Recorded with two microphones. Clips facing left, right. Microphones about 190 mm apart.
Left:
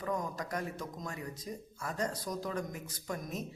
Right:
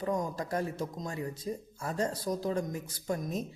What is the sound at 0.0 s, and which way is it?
Speech, 25° right (ahead or behind).